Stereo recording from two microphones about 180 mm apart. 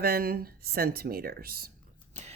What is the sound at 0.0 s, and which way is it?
Speech, 55° right (ahead or behind).